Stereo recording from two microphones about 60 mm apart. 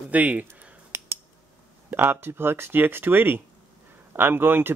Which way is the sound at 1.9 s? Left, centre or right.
Right.